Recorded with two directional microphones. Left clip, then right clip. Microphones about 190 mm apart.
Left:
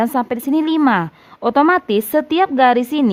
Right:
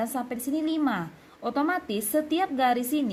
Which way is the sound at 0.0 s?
50° left (ahead or behind).